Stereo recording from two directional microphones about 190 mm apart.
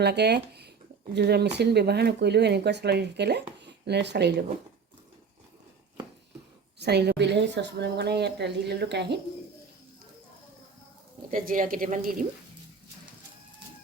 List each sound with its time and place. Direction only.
0.0 s a woman's voice: 60° right (ahead or behind)
6.7 s a woman's voice: 60° right (ahead or behind)
11.3 s a woman's voice: 45° right (ahead or behind)